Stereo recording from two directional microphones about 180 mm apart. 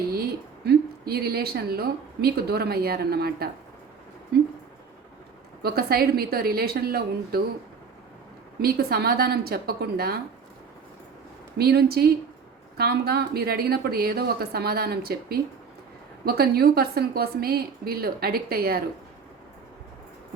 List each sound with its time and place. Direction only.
0.1 s a woman's voice: 60° right (ahead or behind)
5.6 s speech: 60° right (ahead or behind)
8.6 s speech: 60° right (ahead or behind)
11.5 s speech: 60° right (ahead or behind)